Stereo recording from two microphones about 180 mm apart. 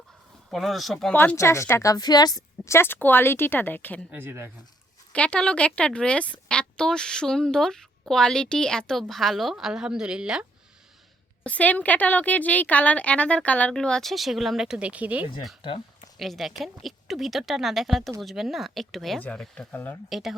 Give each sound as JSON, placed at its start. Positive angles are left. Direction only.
{"t": 0.5, "sound": "a woman's voice", "side_deg": 0}
{"t": 4.1, "sound": "speech", "side_deg": -10}
{"t": 5.1, "sound": "a woman's voice", "side_deg": 5}
{"t": 11.4, "sound": "a woman's voice", "side_deg": 10}
{"t": 20.1, "sound": "speech", "side_deg": 0}